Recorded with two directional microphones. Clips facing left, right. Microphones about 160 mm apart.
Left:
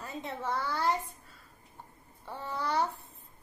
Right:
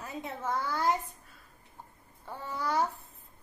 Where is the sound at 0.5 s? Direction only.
15° right (ahead or behind).